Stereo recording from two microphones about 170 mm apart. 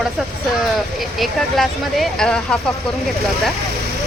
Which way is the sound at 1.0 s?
Centre (ahead or behind).